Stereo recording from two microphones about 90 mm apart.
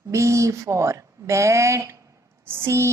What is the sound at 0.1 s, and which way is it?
Speech, 35° right (ahead or behind).